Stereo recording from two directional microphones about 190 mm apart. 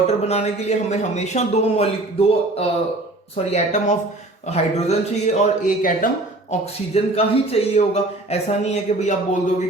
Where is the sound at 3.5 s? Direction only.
35° left (ahead or behind).